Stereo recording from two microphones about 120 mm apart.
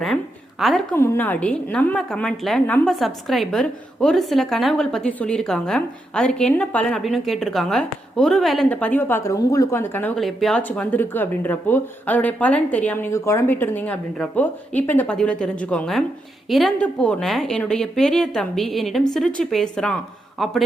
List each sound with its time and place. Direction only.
0.6 s a woman's voice: centre (ahead or behind)
0.9 s a woman's voice: 20° left (ahead or behind); by 8.6 s centre (ahead or behind)
8.7 s speech: 15° left (ahead or behind)
9.3 s speech: 30° left (ahead or behind)
10.2 s a woman's voice: centre (ahead or behind)
10.6 s a woman's voice: 15° left (ahead or behind)